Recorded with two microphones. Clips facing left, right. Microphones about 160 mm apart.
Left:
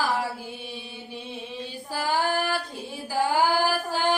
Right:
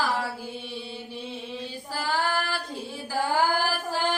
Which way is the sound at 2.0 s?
15° left (ahead or behind).